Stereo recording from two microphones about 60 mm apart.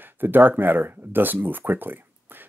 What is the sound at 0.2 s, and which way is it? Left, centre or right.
Speech, right.